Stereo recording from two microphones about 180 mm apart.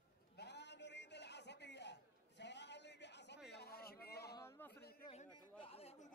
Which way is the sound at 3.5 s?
60° left (ahead or behind).